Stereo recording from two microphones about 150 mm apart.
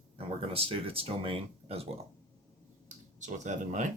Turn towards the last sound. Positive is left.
turn(degrees=-55)  # may be behind; listen again after turning